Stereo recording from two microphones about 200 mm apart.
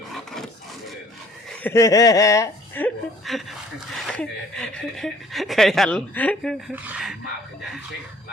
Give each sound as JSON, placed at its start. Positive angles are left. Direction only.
{"t": 1.6, "sound": "speech", "side_deg": 15}
{"t": 6.7, "sound": "speech", "side_deg": -5}